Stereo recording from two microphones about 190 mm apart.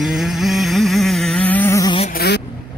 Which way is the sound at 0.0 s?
Centre (ahead or behind).